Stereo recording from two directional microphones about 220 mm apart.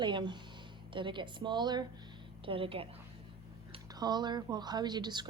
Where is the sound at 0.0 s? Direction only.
20° right (ahead or behind).